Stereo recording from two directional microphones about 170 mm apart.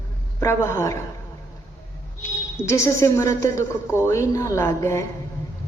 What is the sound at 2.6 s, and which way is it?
A woman's voice, 15° left (ahead or behind).